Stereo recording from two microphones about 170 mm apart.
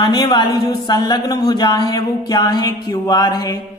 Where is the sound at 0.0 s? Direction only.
25° left (ahead or behind).